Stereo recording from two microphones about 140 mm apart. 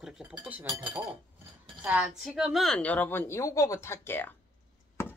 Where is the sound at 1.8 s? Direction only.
10° right (ahead or behind); by 4.3 s 15° left (ahead or behind).